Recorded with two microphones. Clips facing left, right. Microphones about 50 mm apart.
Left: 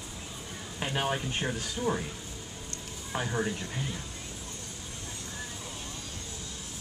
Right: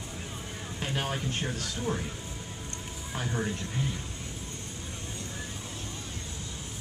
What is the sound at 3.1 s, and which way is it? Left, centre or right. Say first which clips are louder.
Speech: left 2 dB; centre.